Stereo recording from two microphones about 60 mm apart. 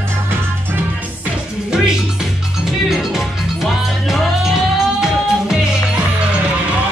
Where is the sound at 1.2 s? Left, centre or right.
Centre.